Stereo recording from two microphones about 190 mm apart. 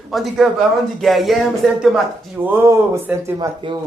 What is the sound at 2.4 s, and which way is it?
Speech, 10° right (ahead or behind).